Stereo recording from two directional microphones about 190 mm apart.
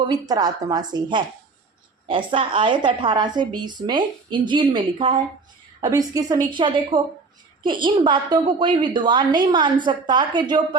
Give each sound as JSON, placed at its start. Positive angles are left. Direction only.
{"t": 0.1, "sound": "a woman's voice", "side_deg": -20}